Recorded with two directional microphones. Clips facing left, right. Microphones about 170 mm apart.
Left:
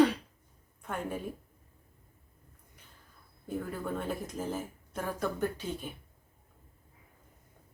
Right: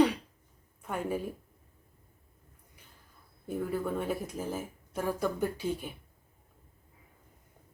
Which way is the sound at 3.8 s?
10° right (ahead or behind).